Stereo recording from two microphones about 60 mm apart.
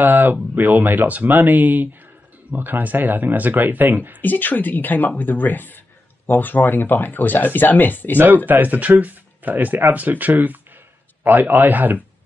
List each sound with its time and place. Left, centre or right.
0.0 s speech: right
4.2 s speech: left
8.5 s speech: right